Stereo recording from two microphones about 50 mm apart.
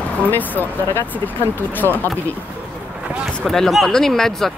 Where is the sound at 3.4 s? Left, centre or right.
Centre.